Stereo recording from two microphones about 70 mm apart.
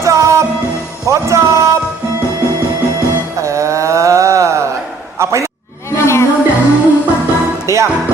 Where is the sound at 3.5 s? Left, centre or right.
Right.